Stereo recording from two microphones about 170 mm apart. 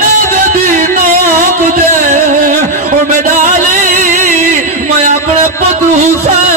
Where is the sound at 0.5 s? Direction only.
50° right (ahead or behind).